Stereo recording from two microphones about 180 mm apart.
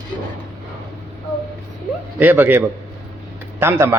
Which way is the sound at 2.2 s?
10° right (ahead or behind).